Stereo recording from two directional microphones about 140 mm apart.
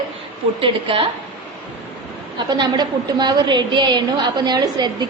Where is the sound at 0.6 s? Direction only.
40° right (ahead or behind).